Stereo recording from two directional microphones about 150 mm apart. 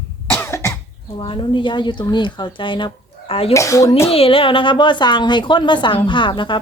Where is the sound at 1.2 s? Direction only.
35° left (ahead or behind).